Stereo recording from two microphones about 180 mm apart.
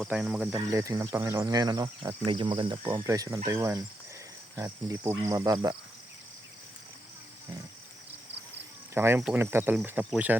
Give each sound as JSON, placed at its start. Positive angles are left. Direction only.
{"t": 0.0, "sound": "cricket", "side_deg": -5}
{"t": 0.5, "sound": "speech", "side_deg": -15}
{"t": 3.0, "sound": "speech", "side_deg": -15}
{"t": 9.0, "sound": "speech", "side_deg": -10}